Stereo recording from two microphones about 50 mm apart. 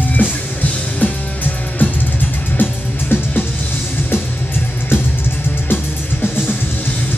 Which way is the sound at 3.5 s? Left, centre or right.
Left.